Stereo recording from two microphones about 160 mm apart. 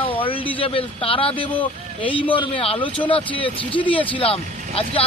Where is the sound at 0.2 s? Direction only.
35° left (ahead or behind).